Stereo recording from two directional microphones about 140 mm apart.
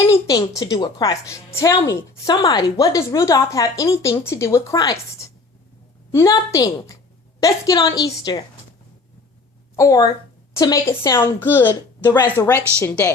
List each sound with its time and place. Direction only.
0.1 s speech: 25° left (ahead or behind)
6.1 s speech: 25° left (ahead or behind)
9.7 s a woman's voice: 25° left (ahead or behind)